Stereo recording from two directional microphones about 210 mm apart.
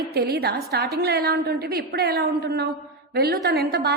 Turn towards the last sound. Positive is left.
turn(degrees=-50)  # may be behind; listen again after turning